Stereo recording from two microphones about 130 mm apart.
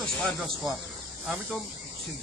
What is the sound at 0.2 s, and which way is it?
Speech, centre (ahead or behind).